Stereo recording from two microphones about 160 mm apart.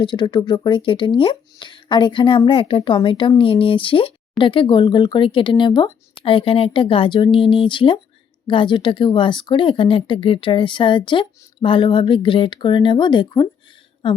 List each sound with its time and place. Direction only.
0.0 s speech: 30° left (ahead or behind)